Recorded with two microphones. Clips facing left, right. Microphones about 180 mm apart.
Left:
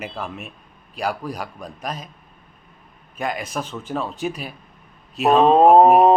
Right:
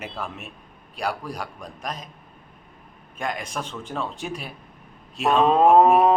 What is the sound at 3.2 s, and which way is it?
A man's voice, 5° left (ahead or behind).